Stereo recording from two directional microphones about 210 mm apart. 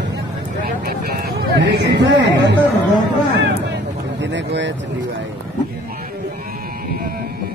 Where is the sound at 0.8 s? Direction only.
45° right (ahead or behind).